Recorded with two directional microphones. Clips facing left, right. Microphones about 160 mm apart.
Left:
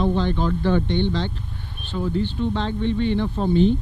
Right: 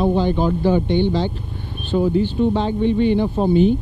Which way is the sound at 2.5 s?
10° right (ahead or behind).